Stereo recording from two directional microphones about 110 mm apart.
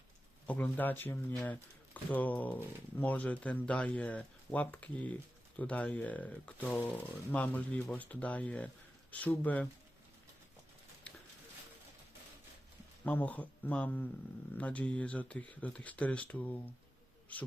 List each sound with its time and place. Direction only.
0.4 s speech: 15° left (ahead or behind)
13.1 s speech: 15° left (ahead or behind)